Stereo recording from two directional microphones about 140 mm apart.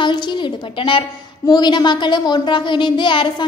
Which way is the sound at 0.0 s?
35° left (ahead or behind).